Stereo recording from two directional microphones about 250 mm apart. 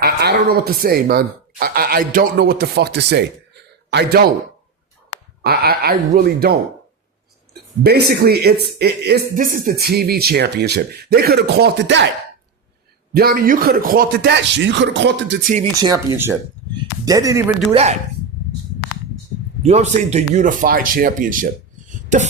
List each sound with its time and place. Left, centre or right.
0.0 s speech: right
5.4 s speech: right
7.9 s speech: right
13.1 s speech: right
15.8 s speech: centre
19.6 s speech: right